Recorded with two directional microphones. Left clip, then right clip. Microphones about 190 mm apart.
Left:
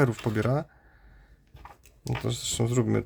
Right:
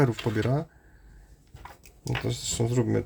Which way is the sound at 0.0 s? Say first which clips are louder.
Even; 25° left (ahead or behind).